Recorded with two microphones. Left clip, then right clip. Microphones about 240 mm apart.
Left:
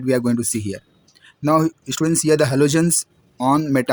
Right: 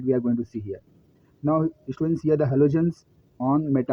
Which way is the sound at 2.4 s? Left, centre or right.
Left.